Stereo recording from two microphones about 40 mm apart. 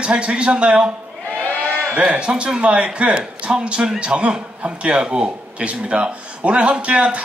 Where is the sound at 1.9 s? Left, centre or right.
Right.